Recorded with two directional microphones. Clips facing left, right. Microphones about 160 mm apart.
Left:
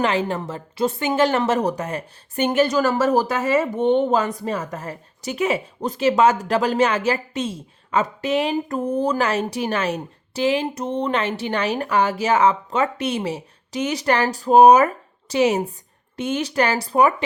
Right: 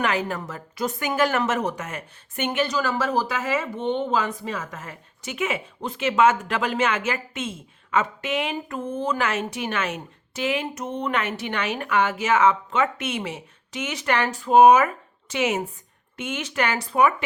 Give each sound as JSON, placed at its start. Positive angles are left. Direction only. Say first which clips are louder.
{"t": 0.0, "sound": "speech", "louder": "left 4 dB", "side_deg": 30}